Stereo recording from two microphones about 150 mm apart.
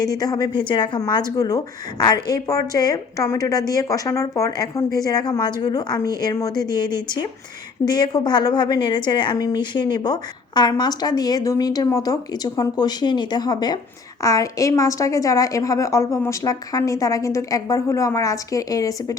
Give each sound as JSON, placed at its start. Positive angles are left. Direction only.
{"t": 0.0, "sound": "speech", "side_deg": 25}